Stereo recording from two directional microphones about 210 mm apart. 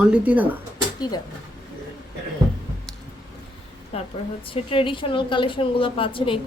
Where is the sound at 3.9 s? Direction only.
30° left (ahead or behind).